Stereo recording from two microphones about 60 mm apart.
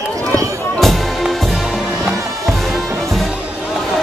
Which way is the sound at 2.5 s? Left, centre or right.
Centre.